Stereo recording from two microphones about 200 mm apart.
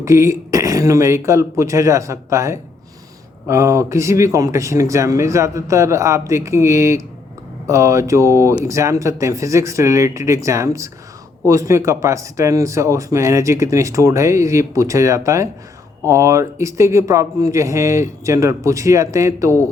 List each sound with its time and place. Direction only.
0.0 s speech: 15° right (ahead or behind)